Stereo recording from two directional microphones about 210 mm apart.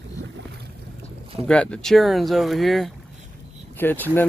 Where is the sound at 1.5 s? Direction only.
5° left (ahead or behind).